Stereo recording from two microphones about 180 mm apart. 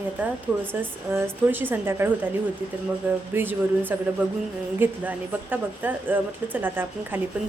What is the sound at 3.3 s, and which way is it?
A woman's voice, 10° right (ahead or behind).